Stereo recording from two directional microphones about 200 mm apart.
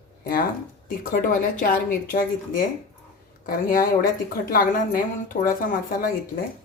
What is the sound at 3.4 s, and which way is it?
A woman's voice, 45° left (ahead or behind).